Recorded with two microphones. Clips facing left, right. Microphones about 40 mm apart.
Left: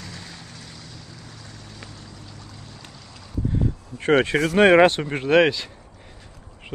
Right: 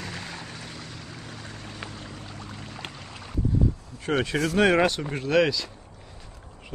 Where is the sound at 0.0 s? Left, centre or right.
Right.